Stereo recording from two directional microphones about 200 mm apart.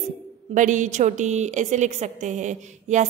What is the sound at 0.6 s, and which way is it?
A woman's voice, 40° right (ahead or behind).